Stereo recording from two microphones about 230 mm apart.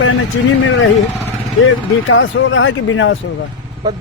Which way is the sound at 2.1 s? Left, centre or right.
Left.